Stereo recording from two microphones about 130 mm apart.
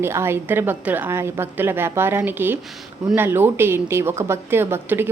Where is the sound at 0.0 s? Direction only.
20° right (ahead or behind).